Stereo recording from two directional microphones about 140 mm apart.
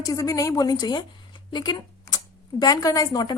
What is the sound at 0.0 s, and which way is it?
A woman's voice, 25° left (ahead or behind).